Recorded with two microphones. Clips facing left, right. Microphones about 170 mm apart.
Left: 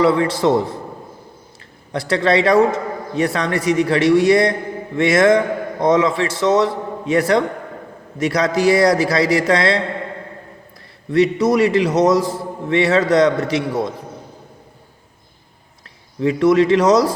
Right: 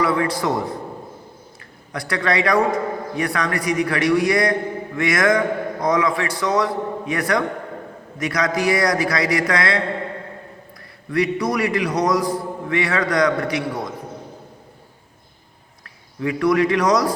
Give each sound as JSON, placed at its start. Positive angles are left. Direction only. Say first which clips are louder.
{"t": 0.0, "sound": "a man's voice", "louder": "left 5 dB", "side_deg": 25}
{"t": 1.9, "sound": "a man's voice", "louder": "left 6 dB", "side_deg": 30}
{"t": 11.1, "sound": "a man's voice", "louder": "left 6 dB", "side_deg": 25}
{"t": 16.2, "sound": "a man's voice", "louder": "left 4 dB", "side_deg": 25}